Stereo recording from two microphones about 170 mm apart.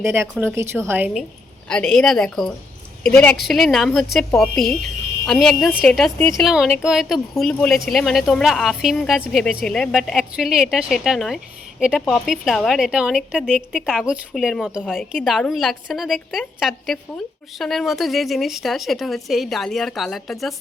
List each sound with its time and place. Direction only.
0.0 s speech: 15° right (ahead or behind)
1.6 s a woman's voice: 5° left (ahead or behind)